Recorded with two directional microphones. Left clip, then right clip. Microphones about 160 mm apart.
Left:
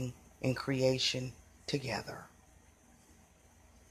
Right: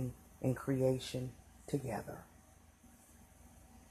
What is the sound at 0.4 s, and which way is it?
Speech, 10° left (ahead or behind).